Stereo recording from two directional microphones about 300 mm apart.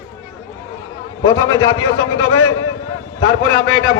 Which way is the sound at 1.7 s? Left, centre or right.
Left.